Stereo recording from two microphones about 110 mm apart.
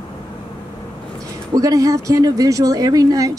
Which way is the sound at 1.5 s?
30° right (ahead or behind).